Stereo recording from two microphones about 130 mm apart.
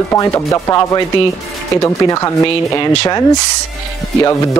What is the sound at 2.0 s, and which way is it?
Speech, 25° left (ahead or behind).